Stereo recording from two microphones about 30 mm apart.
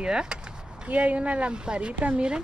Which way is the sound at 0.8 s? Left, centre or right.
Right.